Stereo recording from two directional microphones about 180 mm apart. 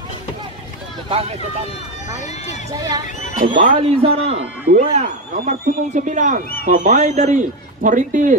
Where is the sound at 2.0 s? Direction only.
40° left (ahead or behind).